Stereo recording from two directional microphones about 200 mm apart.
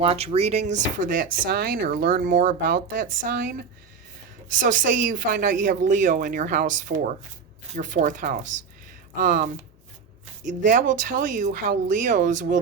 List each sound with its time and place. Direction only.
0.0 s a woman's voice: 30° right (ahead or behind)
0.7 s a woman's voice: 45° right (ahead or behind)